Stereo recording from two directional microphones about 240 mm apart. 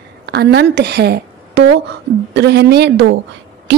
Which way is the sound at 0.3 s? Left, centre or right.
Right.